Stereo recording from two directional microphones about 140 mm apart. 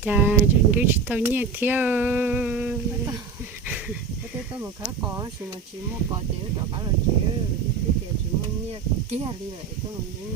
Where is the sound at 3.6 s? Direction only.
10° right (ahead or behind).